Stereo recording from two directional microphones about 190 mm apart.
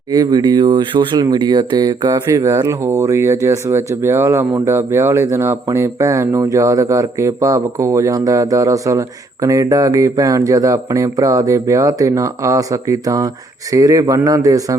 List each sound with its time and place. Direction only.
0.1 s speech: 20° right (ahead or behind)